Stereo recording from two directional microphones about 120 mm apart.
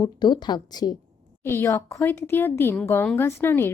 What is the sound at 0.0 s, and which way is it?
Speech, 35° left (ahead or behind).